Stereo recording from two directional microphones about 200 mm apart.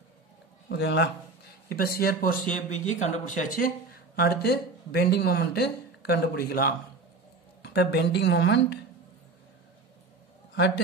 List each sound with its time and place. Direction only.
0.7 s a woman's voice: 60° left (ahead or behind)